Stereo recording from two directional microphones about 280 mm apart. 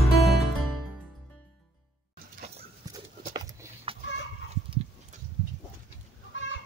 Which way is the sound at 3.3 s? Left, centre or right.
Centre.